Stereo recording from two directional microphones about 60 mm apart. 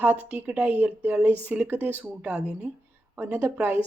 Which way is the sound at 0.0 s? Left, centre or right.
Right.